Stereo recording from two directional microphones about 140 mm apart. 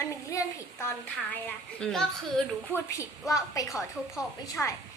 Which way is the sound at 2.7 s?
20° left (ahead or behind).